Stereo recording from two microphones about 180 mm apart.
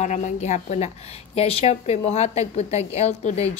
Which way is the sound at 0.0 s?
40° left (ahead or behind).